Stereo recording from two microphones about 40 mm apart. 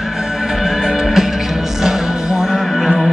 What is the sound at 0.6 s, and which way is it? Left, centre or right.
Music, centre.